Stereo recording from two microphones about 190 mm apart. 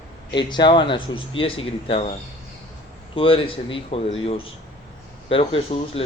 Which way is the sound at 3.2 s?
30° left (ahead or behind).